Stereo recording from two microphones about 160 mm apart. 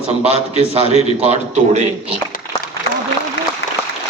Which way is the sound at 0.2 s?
40° right (ahead or behind).